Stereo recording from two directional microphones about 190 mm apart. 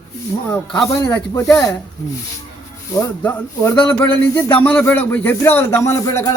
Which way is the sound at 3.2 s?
10° left (ahead or behind).